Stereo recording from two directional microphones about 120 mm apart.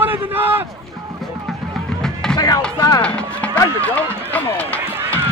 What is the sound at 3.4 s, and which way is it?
Run, 10° left (ahead or behind).